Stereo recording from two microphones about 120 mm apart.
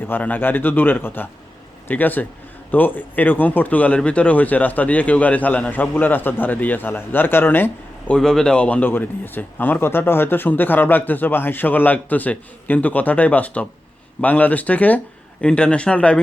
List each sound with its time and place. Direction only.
0.1 s speech: 15° left (ahead or behind)